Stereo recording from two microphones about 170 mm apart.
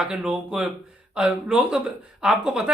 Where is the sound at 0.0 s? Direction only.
5° right (ahead or behind).